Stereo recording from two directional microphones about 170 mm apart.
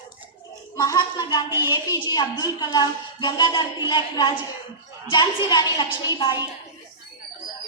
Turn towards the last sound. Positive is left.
turn(degrees=25)  # may be behind; listen again after turning